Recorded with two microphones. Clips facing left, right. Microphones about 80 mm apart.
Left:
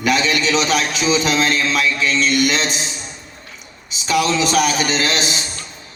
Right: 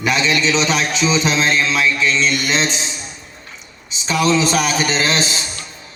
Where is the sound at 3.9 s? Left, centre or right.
Right.